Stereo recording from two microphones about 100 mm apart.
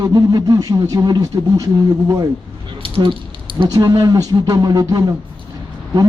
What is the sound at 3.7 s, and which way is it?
Speech, 40° right (ahead or behind).